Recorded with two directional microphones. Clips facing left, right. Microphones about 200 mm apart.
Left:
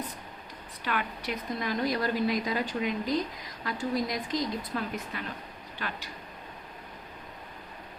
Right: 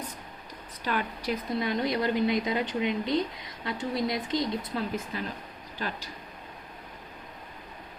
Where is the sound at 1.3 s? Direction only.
25° right (ahead or behind).